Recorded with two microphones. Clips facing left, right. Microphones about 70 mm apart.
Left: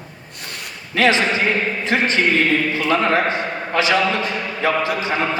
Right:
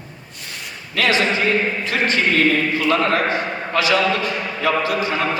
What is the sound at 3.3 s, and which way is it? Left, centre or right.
A man's voice, left.